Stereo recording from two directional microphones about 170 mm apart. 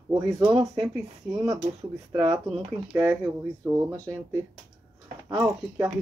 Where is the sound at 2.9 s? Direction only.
20° right (ahead or behind).